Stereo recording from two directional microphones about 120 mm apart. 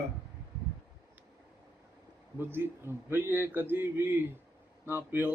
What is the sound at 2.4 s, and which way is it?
A man's voice, 20° right (ahead or behind).